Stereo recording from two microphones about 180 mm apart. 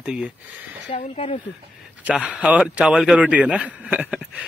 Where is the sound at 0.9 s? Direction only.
35° left (ahead or behind).